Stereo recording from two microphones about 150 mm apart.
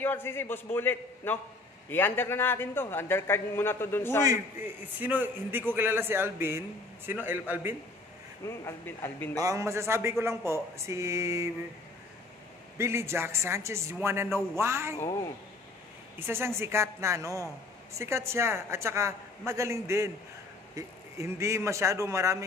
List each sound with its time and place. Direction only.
0.0 s a man's voice: 15° left (ahead or behind)
4.2 s speech: 25° right (ahead or behind)
5.0 s speech: 10° right (ahead or behind)
8.5 s a man's voice: 15° left (ahead or behind)
9.4 s speech: 20° right (ahead or behind)
12.7 s speech: 15° right (ahead or behind)
16.2 s speech: 15° right (ahead or behind)